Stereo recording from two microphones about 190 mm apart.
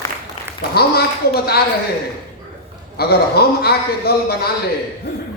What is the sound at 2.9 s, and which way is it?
A man's voice, 55° left (ahead or behind).